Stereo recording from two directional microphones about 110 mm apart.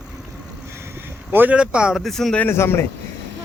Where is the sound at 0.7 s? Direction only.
25° right (ahead or behind); by 2.4 s 5° left (ahead or behind).